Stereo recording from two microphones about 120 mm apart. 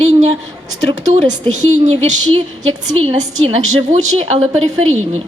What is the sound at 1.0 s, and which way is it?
A woman's voice, 85° right.